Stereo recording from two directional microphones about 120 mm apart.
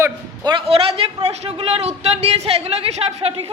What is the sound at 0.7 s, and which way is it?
Speech, 55° right (ahead or behind).